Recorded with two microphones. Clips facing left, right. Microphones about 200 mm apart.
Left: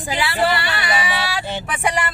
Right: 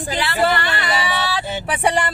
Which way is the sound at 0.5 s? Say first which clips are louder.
Right 1 dB; 10° left (ahead or behind).